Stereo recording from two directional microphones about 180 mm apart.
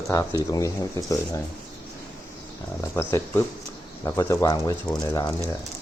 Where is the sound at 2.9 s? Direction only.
10° left (ahead or behind).